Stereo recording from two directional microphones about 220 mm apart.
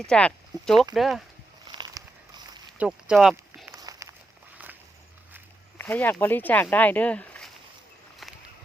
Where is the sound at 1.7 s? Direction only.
20° right (ahead or behind).